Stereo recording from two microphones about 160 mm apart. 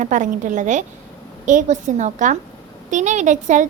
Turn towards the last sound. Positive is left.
turn(degrees=-50)  # may be behind; listen again after turning